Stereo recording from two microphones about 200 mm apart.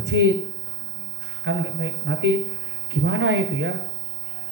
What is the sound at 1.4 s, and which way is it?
Speech, 65° right (ahead or behind).